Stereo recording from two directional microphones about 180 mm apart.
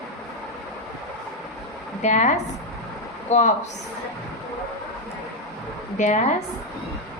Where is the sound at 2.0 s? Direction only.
40° left (ahead or behind).